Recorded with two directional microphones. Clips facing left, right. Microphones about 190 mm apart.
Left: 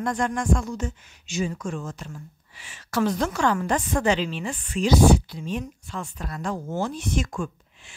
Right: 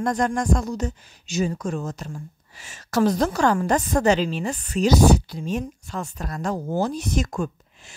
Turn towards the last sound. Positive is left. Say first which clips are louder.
# right 3 dB
turn(degrees=-40)  # may be behind; listen again after turning